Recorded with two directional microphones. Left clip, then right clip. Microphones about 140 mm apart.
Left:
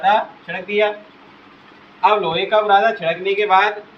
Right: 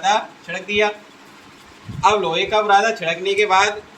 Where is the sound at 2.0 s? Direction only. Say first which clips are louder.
Left 1 dB; 20° left (ahead or behind).